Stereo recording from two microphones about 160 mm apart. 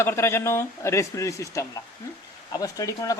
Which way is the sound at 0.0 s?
15° left (ahead or behind).